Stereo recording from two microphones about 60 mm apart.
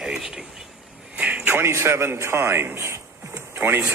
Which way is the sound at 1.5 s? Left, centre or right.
Right.